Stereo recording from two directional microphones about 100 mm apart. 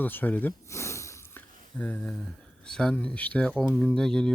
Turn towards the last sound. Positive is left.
turn(degrees=5)  # may be behind; listen again after turning